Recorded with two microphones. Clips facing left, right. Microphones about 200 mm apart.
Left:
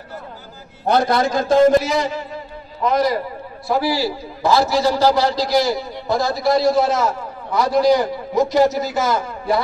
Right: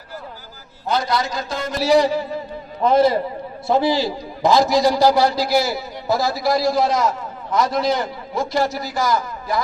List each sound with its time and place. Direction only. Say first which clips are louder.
0.8 s a man's voice: left 5 dB; 55° left (ahead or behind)
1.8 s a man's voice: right 5 dB; 35° right (ahead or behind); by 9.6 s 25° left (ahead or behind)